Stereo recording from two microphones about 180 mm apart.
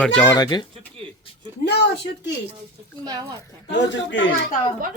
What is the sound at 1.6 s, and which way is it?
Speech, 70° left (ahead or behind).